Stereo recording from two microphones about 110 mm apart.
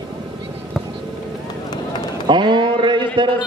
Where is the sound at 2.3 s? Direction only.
45° right (ahead or behind).